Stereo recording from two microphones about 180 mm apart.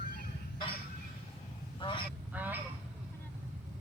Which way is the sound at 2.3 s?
10° right (ahead or behind).